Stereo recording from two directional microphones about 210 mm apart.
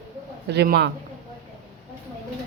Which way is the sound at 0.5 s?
50° right (ahead or behind).